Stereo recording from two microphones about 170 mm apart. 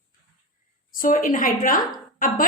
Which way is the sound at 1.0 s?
50° left (ahead or behind).